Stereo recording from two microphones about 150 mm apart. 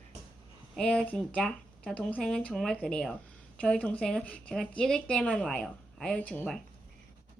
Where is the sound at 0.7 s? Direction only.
10° left (ahead or behind).